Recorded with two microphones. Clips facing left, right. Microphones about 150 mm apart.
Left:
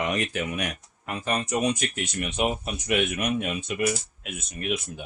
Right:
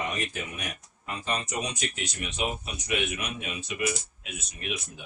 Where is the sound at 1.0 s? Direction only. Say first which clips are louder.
Left 4 dB; 55° left (ahead or behind).